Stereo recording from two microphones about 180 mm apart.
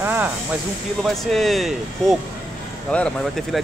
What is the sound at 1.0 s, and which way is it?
Speech, centre (ahead or behind).